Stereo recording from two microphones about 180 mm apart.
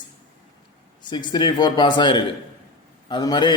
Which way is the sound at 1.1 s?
25° left (ahead or behind).